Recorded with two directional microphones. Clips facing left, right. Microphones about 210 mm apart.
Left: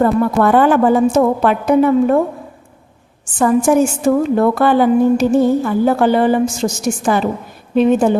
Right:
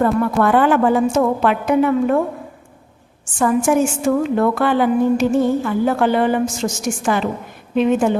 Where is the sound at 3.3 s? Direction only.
35° left (ahead or behind).